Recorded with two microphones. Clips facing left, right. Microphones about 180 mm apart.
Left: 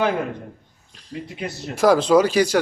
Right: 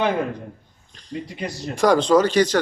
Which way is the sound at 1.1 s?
5° left (ahead or behind).